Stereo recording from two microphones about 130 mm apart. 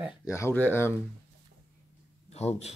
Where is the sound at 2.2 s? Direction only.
55° left (ahead or behind).